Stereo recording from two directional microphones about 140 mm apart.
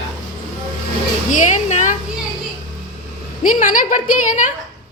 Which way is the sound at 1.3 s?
60° left (ahead or behind).